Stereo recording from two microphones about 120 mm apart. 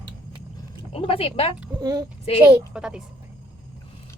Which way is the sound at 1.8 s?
30° right (ahead or behind).